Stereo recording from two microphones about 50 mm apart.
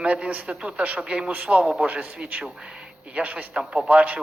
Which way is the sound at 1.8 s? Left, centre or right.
Right.